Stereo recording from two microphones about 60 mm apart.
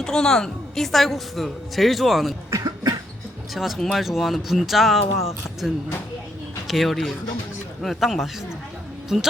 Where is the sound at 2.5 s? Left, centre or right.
Right.